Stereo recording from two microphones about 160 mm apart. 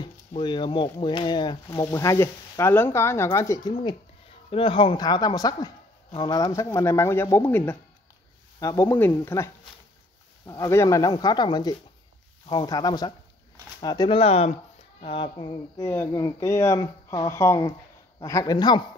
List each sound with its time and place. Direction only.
0.4 s speech: 30° left (ahead or behind)
15.8 s speech: 15° left (ahead or behind)